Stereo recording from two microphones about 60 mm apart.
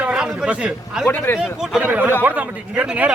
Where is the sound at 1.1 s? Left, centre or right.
Left.